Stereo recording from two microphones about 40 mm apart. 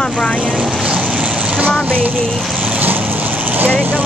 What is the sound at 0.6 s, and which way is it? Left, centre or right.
Vehicle, centre.